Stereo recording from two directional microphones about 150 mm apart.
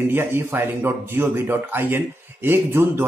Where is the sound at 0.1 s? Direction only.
15° right (ahead or behind).